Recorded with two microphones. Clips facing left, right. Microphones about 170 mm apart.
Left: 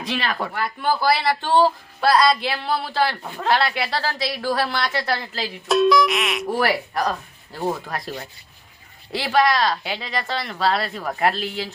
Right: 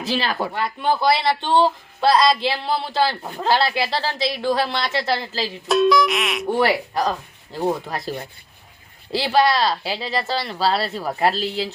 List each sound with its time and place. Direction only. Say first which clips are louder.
0.1 s speech: right 2 dB; 30° right (ahead or behind)
5.6 s speech: even; centre (ahead or behind)
6.6 s speech: right 3 dB; 25° right (ahead or behind)
9.1 s speech: right 1 dB; 30° right (ahead or behind)